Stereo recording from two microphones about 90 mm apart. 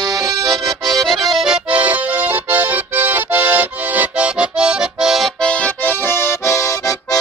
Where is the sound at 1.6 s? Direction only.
15° right (ahead or behind).